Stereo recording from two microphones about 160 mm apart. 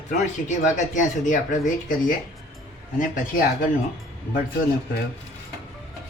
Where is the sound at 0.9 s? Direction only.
50° left (ahead or behind).